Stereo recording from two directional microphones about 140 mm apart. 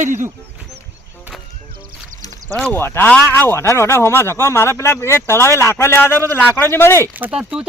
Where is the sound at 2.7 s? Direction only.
15° left (ahead or behind).